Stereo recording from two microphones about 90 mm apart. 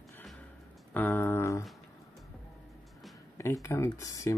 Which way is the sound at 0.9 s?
20° left (ahead or behind).